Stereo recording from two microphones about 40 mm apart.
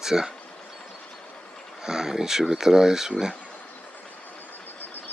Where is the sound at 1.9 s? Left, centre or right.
Centre.